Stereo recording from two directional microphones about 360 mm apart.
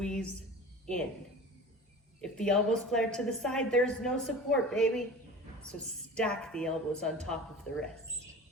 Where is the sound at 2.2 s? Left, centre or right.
Centre.